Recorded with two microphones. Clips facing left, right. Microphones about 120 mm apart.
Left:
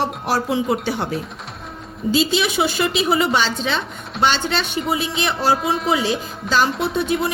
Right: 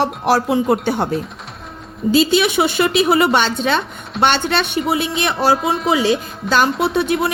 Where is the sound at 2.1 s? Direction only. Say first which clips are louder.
Right 5 dB; 60° right (ahead or behind).